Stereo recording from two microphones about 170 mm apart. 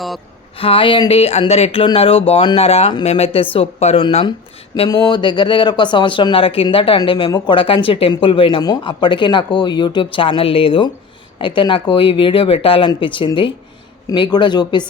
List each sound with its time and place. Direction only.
0.6 s speech: 30° left (ahead or behind)